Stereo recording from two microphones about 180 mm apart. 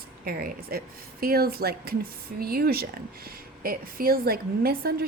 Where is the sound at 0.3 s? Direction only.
55° right (ahead or behind).